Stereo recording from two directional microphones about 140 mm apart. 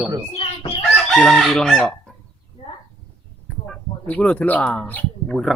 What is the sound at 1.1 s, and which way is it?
Speech, centre (ahead or behind).